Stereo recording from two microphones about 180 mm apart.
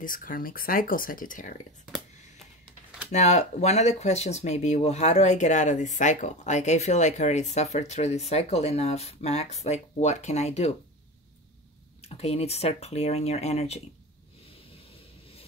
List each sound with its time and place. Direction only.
0.0 s speech: 50° left (ahead or behind)
3.1 s speech: 40° left (ahead or behind)
12.0 s speech: 35° left (ahead or behind)